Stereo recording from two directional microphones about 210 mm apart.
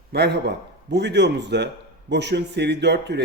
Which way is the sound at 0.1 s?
50° right (ahead or behind).